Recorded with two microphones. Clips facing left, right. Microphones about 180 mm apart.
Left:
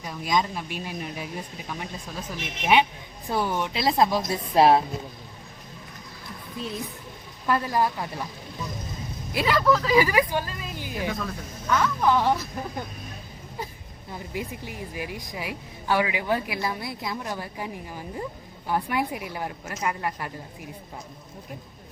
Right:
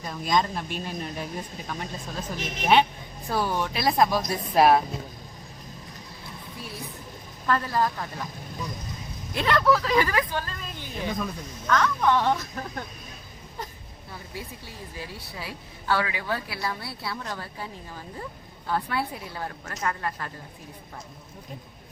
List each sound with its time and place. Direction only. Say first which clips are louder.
0.0 s speech: right 1 dB; 10° left (ahead or behind); by 4.8 s 25° left (ahead or behind)
6.6 s speech: left 7 dB; 20° left (ahead or behind)
9.3 s speech: even; 5° left (ahead or behind)
14.1 s speech: left 6 dB; 15° left (ahead or behind)